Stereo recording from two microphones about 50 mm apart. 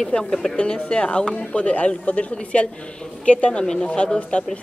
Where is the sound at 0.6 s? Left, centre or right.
Left.